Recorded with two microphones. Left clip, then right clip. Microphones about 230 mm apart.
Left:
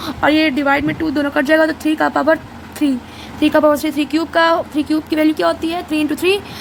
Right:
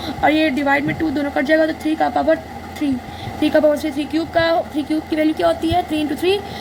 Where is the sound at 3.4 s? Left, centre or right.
Left.